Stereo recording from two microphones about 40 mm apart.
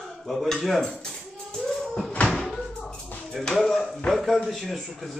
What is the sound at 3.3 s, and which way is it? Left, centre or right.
A man's voice, centre.